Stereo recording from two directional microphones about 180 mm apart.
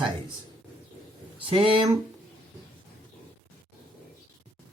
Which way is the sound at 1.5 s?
30° right (ahead or behind).